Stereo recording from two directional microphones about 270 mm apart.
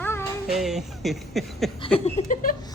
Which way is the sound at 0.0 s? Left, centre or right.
Centre.